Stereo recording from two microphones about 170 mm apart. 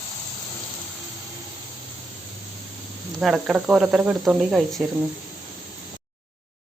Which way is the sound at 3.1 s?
Centre (ahead or behind).